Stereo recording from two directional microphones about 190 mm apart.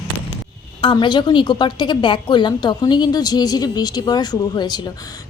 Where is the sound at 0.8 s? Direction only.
25° left (ahead or behind).